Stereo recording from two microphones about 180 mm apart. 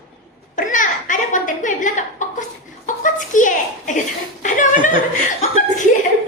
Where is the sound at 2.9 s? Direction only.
45° left (ahead or behind).